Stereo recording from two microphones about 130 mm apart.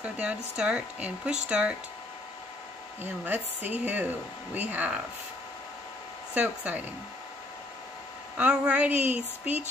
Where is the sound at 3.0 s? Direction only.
15° right (ahead or behind).